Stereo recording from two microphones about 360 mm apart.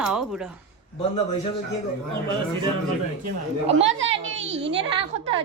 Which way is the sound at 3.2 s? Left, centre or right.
Centre.